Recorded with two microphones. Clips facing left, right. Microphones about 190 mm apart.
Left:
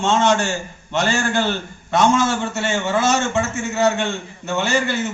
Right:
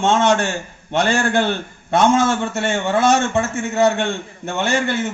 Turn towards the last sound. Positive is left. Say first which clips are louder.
# even
turn(degrees=-55)  # may be behind; listen again after turning